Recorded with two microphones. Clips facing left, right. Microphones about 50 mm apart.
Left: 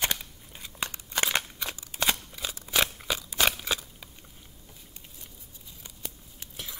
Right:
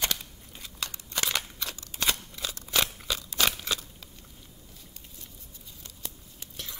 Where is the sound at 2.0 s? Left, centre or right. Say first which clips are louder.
Left 1 dB; centre.